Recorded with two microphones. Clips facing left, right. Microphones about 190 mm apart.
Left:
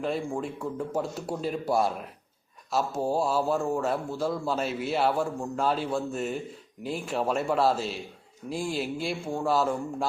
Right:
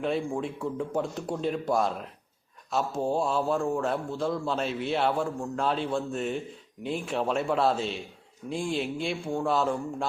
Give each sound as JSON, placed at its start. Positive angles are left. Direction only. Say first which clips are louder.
{"t": 0.0, "sound": "a man's voice", "louder": "right 1 dB", "side_deg": 0}